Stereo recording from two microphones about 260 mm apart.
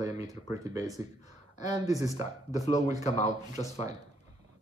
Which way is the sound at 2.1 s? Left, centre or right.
Left.